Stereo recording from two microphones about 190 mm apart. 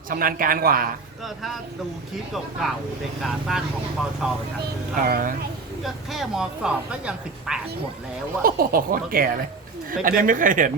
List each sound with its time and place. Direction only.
0.1 s speech: 50° right (ahead or behind)
1.2 s a woman's voice: centre (ahead or behind)
4.9 s speech: 50° right (ahead or behind)
5.8 s a woman's voice: centre (ahead or behind)
8.4 s speech: 50° right (ahead or behind)